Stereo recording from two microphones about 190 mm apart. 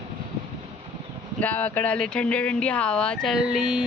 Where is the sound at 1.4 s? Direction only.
10° left (ahead or behind).